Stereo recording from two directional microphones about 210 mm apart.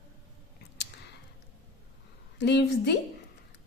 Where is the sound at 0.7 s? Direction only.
55° left (ahead or behind).